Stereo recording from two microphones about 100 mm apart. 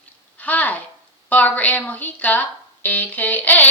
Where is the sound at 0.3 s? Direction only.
15° left (ahead or behind).